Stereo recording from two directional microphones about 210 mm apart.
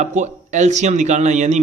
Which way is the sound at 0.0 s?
35° right (ahead or behind).